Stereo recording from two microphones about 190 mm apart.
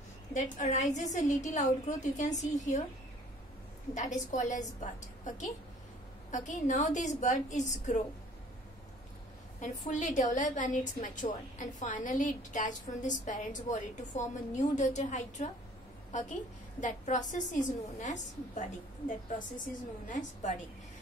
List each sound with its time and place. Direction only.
0.3 s a woman's voice: 40° left (ahead or behind)
3.9 s a woman's voice: 40° left (ahead or behind)
9.6 s a woman's voice: 40° left (ahead or behind)